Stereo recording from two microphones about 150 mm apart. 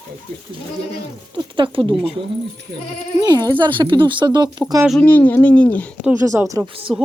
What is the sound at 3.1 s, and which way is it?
Speech, 25° right (ahead or behind).